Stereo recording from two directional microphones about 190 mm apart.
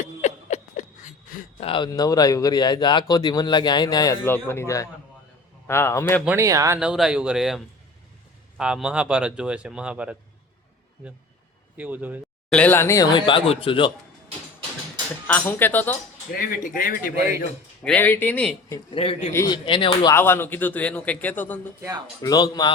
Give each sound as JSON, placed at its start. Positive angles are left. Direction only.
{"t": 0.0, "sound": "a sound", "side_deg": 40}
{"t": 1.6, "sound": "speech", "side_deg": 25}
{"t": 6.2, "sound": "speech", "side_deg": -15}
{"t": 6.7, "sound": "speech", "side_deg": -5}
{"t": 11.8, "sound": "speech", "side_deg": -10}
{"t": 12.5, "sound": "speech", "side_deg": 5}
{"t": 15.3, "sound": "speech", "side_deg": 10}
{"t": 16.4, "sound": "speech", "side_deg": 45}
{"t": 17.8, "sound": "speech", "side_deg": 10}
{"t": 18.9, "sound": "speech", "side_deg": 30}
{"t": 19.3, "sound": "speech", "side_deg": 15}
{"t": 19.6, "sound": "speech", "side_deg": 25}
{"t": 20.1, "sound": "speech", "side_deg": 10}
{"t": 22.2, "sound": "speech", "side_deg": 20}